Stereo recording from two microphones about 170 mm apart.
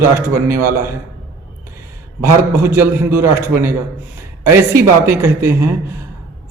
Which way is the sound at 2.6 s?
15° right (ahead or behind).